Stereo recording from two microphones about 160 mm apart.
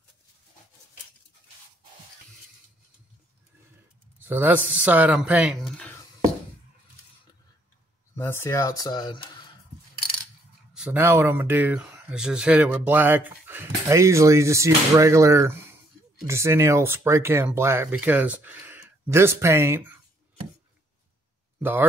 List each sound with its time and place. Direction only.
4.2 s speech: 10° right (ahead or behind)
8.2 s speech: 15° left (ahead or behind)
10.7 s speech: 10° right (ahead or behind)
21.5 s speech: 15° right (ahead or behind)